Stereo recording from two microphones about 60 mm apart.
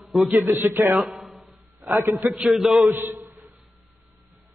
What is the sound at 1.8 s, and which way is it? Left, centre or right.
Speech, right.